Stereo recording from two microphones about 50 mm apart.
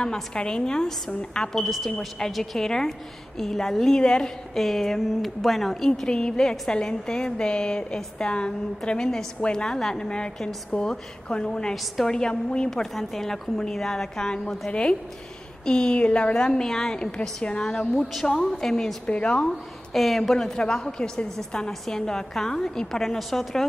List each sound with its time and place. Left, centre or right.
0.0 s a woman's voice: centre
1.6 s a woman's voice: centre
4.6 s a woman's voice: centre
6.0 s a woman's voice: centre
12.6 s a woman's voice: centre
19.0 s a woman's voice: left
19.9 s a woman's voice: centre
20.5 s a woman's voice: centre